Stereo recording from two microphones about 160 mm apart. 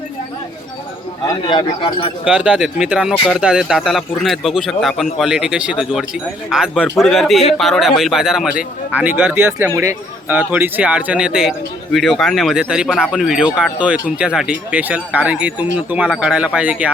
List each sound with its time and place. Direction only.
1.2 s a man's voice: 30° left (ahead or behind)
2.2 s a man's voice: 5° right (ahead or behind)